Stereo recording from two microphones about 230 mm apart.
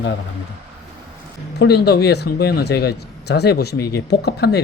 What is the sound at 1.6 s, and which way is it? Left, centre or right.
Speech, left.